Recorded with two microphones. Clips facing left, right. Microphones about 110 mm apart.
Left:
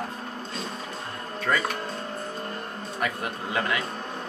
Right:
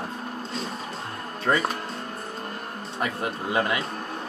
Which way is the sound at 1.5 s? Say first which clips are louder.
Right 3 dB; 25° right (ahead or behind).